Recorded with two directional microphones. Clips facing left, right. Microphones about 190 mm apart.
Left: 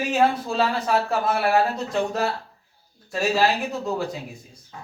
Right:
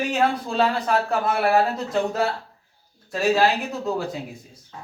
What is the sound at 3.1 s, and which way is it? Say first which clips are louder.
Speech: right 2 dB; centre (ahead or behind).